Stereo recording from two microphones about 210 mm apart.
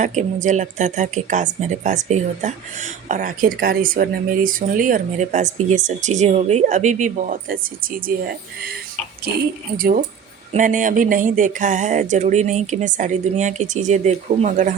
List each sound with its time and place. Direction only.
0.0 s speech: 35° right (ahead or behind)
9.7 s speech: 45° right (ahead or behind)